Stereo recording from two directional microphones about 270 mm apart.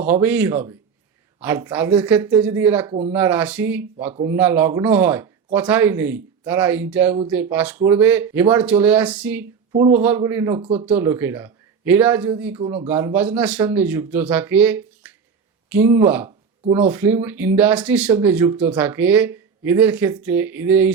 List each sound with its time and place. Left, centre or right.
0.0 s speech: centre
9.7 s speech: right
10.0 s speech: centre